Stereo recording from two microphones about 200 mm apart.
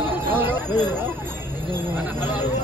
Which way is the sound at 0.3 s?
10° right (ahead or behind).